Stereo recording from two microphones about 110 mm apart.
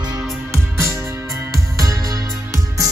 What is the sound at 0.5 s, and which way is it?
Music, 30° right (ahead or behind).